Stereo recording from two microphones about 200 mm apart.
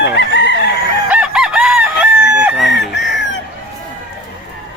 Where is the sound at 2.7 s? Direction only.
60° left (ahead or behind).